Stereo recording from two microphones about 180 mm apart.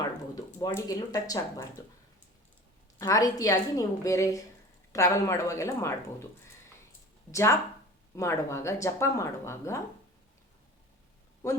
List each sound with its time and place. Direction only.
0.6 s a woman's voice: 20° left (ahead or behind)
3.0 s a woman's voice: 20° left (ahead or behind)
7.3 s speech: 15° left (ahead or behind)
11.4 s speech: 20° left (ahead or behind)